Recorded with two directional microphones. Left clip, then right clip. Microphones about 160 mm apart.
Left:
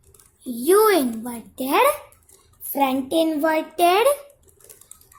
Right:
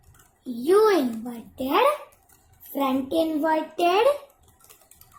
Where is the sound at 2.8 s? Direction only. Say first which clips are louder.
Left 4 dB; 50° left (ahead or behind).